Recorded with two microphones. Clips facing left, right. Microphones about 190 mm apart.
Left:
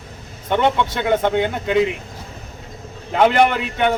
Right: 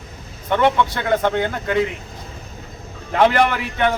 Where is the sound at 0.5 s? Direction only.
20° left (ahead or behind).